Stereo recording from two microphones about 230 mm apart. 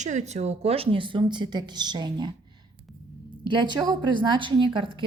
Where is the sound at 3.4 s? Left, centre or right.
Centre.